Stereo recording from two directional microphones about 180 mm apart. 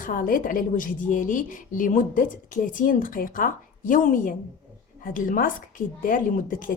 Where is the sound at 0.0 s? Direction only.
50° left (ahead or behind).